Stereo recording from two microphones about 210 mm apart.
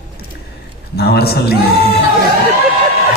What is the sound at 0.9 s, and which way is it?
Speech, 50° left (ahead or behind).